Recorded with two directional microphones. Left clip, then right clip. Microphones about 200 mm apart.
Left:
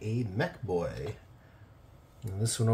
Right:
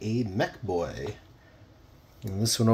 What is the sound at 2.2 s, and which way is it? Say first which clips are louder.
Speech: right 7 dB; 45° right (ahead or behind).